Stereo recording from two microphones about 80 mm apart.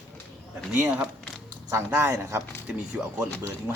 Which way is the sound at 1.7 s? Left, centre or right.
Right.